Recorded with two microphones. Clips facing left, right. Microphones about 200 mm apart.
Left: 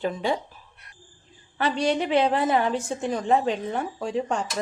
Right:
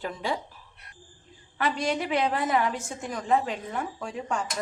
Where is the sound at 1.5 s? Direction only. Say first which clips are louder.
Left 4 dB; 30° left (ahead or behind).